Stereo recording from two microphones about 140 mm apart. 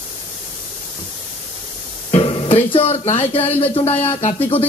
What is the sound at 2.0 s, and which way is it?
A man's voice, 40° left (ahead or behind).